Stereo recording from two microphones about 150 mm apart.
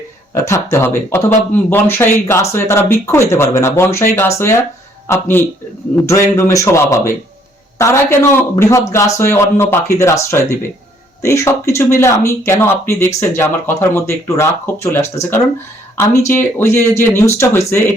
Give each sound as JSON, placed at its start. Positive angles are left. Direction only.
{"t": 0.4, "sound": "a man's voice", "side_deg": 20}